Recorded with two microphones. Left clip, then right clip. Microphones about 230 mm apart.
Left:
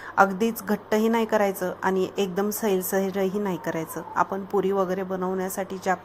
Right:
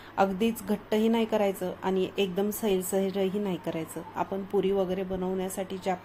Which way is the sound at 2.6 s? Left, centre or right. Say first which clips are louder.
Left 3 dB; left.